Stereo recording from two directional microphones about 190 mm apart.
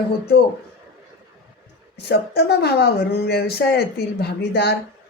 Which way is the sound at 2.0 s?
60° left (ahead or behind).